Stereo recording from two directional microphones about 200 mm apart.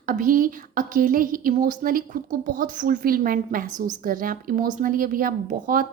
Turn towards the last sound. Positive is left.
turn(degrees=-45)  # may be behind; listen again after turning